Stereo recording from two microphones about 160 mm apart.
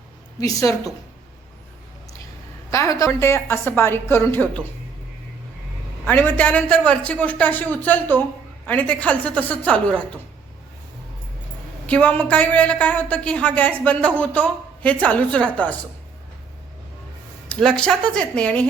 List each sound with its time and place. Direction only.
0.3 s a woman's voice: 20° left (ahead or behind)
2.6 s a man's voice: 20° left (ahead or behind)
6.1 s a man's voice: 10° left (ahead or behind)
11.9 s a man's voice: 10° left (ahead or behind)
17.5 s speech: 5° left (ahead or behind)